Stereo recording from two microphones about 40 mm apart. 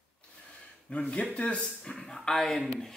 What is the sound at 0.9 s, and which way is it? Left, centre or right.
Speech, left.